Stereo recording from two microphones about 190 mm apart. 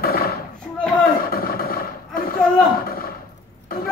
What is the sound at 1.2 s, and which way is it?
Roar, 50° left (ahead or behind).